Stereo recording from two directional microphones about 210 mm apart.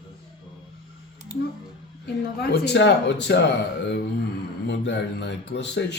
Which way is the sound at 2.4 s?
55° left (ahead or behind).